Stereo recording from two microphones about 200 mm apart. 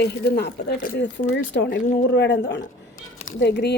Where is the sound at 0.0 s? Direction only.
55° left (ahead or behind).